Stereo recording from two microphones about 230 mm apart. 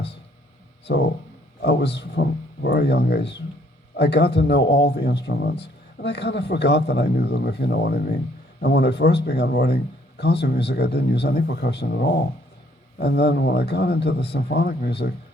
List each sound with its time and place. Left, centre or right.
0.9 s a man's voice: left